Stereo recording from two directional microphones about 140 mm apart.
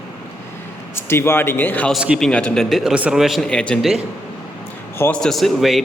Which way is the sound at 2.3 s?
5° left (ahead or behind).